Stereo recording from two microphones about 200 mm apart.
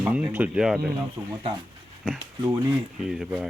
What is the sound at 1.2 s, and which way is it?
Speech, 15° right (ahead or behind).